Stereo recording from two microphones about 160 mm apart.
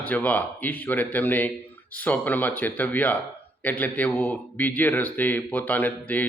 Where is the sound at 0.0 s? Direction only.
10° left (ahead or behind).